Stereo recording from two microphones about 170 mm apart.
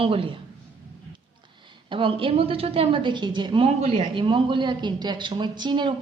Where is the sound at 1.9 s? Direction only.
30° right (ahead or behind).